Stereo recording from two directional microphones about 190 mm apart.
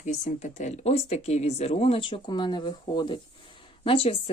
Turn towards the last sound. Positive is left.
turn(degrees=30)  # may be behind; listen again after turning